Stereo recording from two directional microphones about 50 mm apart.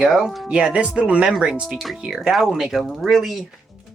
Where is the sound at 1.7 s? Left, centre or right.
Centre.